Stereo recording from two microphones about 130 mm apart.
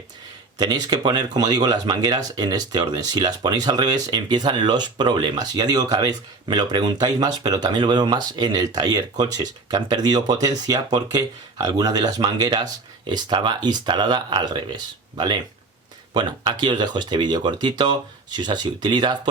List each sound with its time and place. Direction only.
0.6 s speech: 35° right (ahead or behind)